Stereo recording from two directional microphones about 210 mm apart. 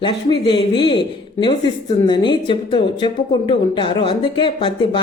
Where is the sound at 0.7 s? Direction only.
20° left (ahead or behind).